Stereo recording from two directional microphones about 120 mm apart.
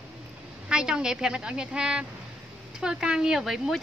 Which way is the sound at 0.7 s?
5° right (ahead or behind).